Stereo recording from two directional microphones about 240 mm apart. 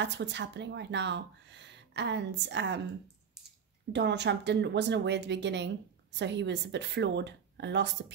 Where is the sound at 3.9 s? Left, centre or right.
Right.